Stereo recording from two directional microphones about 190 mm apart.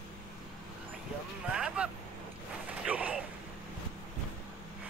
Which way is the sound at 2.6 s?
5° right (ahead or behind).